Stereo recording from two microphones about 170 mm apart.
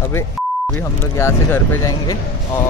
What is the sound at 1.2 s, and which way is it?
Speech, 15° left (ahead or behind).